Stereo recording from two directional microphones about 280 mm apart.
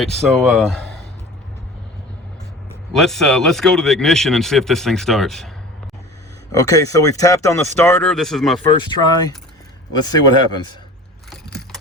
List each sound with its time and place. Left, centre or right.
0.0 s speech: centre
2.9 s speech: centre
6.5 s speech: centre
8.8 s speech: centre